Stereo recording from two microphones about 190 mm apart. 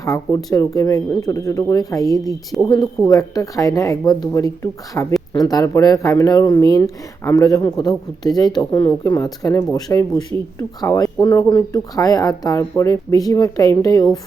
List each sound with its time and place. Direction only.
0.0 s speech: 15° left (ahead or behind)
2.5 s speech: centre (ahead or behind)
3.1 s speech: 20° left (ahead or behind)